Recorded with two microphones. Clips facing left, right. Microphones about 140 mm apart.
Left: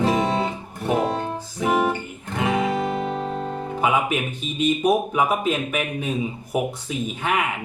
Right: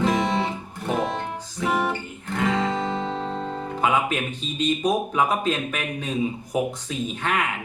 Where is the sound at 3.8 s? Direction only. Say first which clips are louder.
Left 1 dB; 10° left (ahead or behind).